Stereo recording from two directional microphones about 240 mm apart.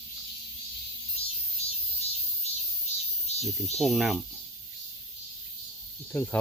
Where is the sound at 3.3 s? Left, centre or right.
Left.